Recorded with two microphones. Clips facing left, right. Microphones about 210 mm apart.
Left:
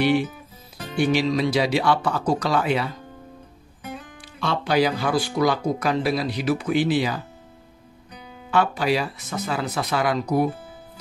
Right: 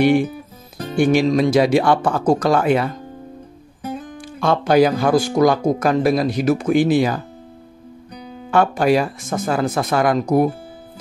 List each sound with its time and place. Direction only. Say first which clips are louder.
0.0 s speech: right 5 dB; 50° right (ahead or behind)